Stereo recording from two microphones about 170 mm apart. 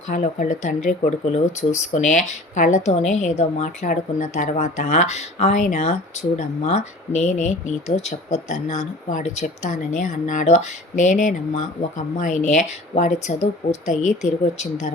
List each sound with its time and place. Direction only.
0.1 s speech: 45° left (ahead or behind)